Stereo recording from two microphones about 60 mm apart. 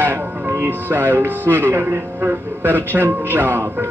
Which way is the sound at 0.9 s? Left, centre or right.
Right.